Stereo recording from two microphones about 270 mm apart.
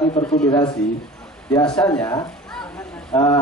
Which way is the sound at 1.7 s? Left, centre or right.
Centre.